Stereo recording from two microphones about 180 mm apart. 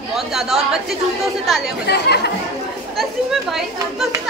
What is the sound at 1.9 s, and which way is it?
Speech, 65° left (ahead or behind).